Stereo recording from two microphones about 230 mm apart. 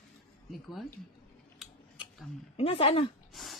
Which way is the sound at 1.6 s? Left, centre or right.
Centre.